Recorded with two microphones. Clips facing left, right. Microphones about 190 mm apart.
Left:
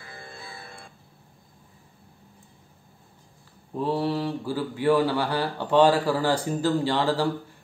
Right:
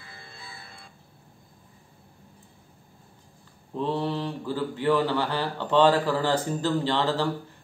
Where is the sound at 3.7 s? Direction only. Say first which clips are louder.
Left 2 dB; 10° left (ahead or behind).